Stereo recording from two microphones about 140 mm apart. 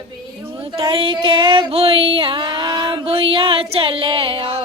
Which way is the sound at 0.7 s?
40° right (ahead or behind).